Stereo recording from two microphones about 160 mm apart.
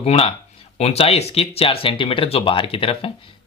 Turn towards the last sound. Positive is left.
turn(degrees=35)  # may be behind; listen again after turning